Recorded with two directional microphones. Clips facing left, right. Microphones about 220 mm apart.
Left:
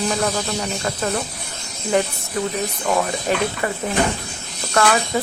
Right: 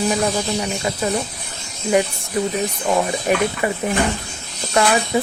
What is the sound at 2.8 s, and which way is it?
Speech, 15° right (ahead or behind).